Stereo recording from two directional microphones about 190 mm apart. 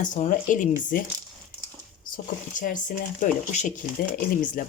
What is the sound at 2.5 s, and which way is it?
Speech, 45° left (ahead or behind).